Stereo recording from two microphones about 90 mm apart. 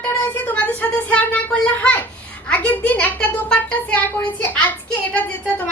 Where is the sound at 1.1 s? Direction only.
15° left (ahead or behind).